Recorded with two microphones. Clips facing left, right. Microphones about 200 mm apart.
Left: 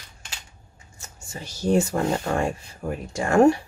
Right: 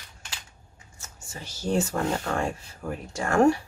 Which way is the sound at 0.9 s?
15° left (ahead or behind).